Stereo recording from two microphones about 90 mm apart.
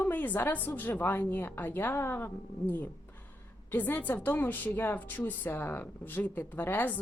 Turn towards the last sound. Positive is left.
turn(degrees=20)  # may be behind; listen again after turning